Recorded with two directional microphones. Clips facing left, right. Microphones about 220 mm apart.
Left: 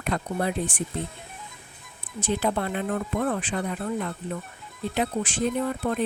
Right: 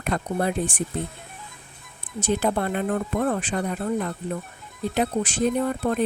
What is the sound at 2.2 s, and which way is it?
Speech, 45° right (ahead or behind).